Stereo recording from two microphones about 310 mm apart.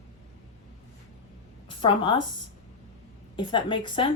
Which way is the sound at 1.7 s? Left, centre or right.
Centre.